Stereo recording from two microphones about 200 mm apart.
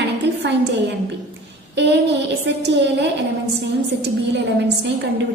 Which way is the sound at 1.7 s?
60° right (ahead or behind).